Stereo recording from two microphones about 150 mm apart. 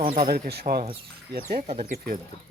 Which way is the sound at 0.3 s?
90° right.